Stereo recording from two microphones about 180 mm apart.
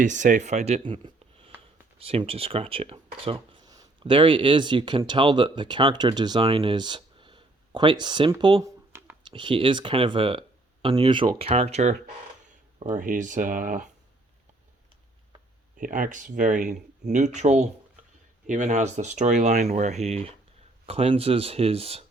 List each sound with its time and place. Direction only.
0.0 s speech: 45° right (ahead or behind)
1.0 s a sound: 30° right (ahead or behind)
2.0 s speech: 30° right (ahead or behind)
8.9 s a sound: 15° right (ahead or behind)
9.2 s speech: 25° right (ahead or behind); by 13.8 s 45° right (ahead or behind)
15.7 s speech: 45° right (ahead or behind)